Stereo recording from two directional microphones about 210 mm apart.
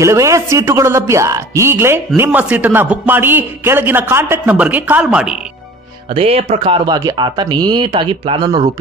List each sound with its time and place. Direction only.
0.0 s a man's voice: 15° right (ahead or behind)
6.1 s speech: 30° right (ahead or behind)